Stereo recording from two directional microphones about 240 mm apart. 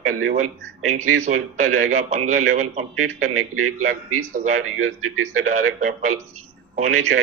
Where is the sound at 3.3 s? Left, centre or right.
Right.